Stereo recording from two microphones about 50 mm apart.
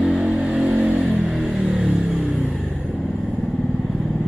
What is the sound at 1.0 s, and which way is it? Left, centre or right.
Vehicle, centre.